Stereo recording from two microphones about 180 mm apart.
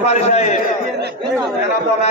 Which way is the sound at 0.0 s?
35° left (ahead or behind).